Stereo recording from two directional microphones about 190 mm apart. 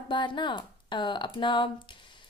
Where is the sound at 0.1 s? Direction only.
25° left (ahead or behind).